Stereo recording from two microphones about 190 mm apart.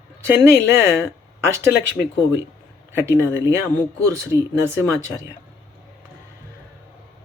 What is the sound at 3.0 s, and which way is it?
Speech, 15° right (ahead or behind).